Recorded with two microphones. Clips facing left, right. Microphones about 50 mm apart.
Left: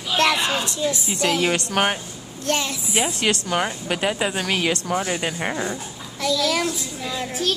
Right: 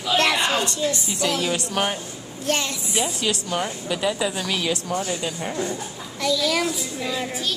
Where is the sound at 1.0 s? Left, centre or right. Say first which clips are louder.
Left 3 dB; left.